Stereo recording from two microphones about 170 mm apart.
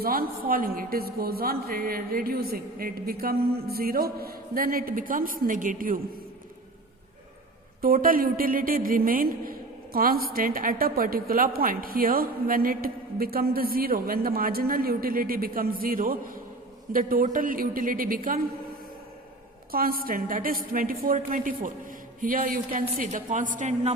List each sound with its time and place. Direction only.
0.0 s a woman's voice: 60° right (ahead or behind)
7.8 s a woman's voice: 60° right (ahead or behind)
19.7 s a woman's voice: 60° right (ahead or behind)